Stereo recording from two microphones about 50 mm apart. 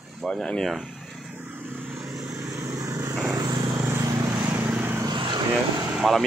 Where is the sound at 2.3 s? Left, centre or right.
Right.